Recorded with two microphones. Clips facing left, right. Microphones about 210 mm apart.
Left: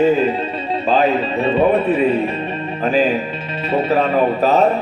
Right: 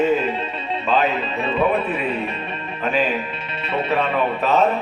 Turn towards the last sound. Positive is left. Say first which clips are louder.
# left 4 dB
turn(degrees=40)  # may be behind; listen again after turning